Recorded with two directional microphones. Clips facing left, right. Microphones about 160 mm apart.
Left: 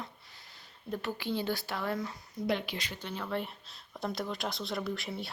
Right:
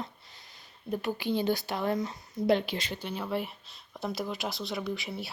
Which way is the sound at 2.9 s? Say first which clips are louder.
Right 2 dB; 15° right (ahead or behind).